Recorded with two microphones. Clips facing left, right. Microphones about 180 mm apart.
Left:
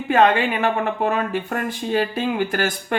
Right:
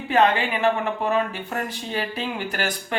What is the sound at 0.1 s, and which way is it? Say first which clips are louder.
Speech: left 3 dB; 50° left (ahead or behind).